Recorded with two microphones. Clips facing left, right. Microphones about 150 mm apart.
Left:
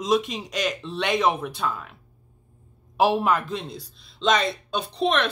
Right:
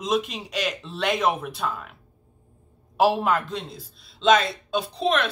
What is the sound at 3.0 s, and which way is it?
Speech, centre (ahead or behind).